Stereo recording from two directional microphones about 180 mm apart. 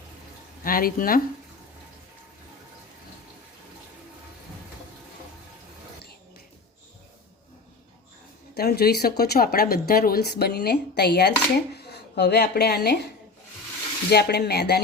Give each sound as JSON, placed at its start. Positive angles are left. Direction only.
{"t": 0.6, "sound": "speech", "side_deg": 55}
{"t": 8.5, "sound": "speech", "side_deg": 60}
{"t": 14.1, "sound": "speech", "side_deg": 65}